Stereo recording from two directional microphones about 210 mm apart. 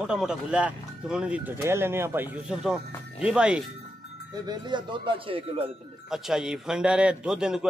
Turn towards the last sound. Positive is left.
turn(degrees=-5)  # may be behind; listen again after turning